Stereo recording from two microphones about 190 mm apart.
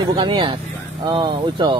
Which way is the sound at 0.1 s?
25° right (ahead or behind).